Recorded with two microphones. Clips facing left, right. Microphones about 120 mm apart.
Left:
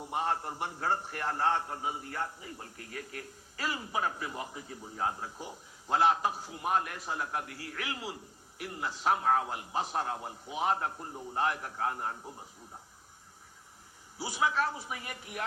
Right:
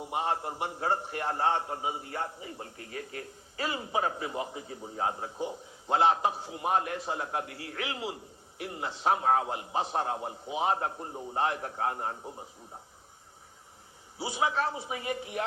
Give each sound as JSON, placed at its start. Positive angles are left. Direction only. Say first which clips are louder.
{"t": 0.0, "sound": "a man's voice", "louder": "right 2 dB", "side_deg": -20}
{"t": 14.2, "sound": "a man's voice", "louder": "right 1 dB", "side_deg": -25}